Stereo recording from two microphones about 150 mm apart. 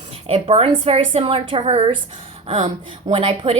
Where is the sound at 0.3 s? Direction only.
40° right (ahead or behind).